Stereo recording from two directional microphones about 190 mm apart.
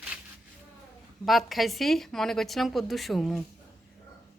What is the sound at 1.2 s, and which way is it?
A woman's voice, centre (ahead or behind).